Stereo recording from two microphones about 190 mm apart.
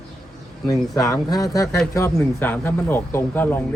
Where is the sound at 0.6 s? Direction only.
15° left (ahead or behind).